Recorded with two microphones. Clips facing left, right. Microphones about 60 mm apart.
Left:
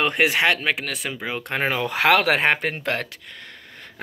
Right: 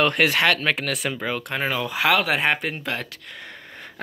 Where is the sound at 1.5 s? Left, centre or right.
Left.